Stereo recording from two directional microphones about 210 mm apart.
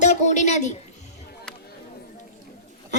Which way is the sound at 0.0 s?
35° left (ahead or behind).